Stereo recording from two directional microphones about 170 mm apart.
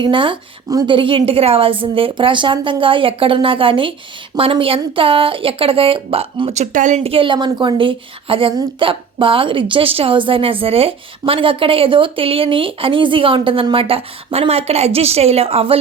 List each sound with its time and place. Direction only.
0.0 s speech: 30° right (ahead or behind)